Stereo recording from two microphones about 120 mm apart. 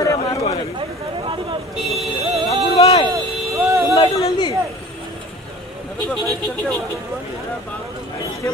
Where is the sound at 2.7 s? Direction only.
60° left (ahead or behind).